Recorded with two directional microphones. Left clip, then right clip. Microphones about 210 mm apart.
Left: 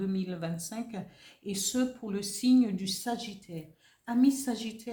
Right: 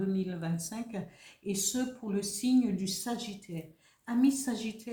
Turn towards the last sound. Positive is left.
turn(degrees=35)  # may be behind; listen again after turning